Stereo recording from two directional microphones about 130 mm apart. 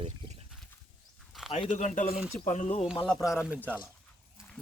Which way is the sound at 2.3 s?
70° left (ahead or behind).